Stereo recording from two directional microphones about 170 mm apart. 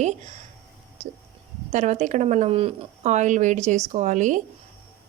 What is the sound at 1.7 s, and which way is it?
Speech, 45° right (ahead or behind).